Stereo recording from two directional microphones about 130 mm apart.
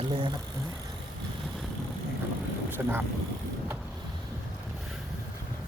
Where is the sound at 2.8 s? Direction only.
15° right (ahead or behind).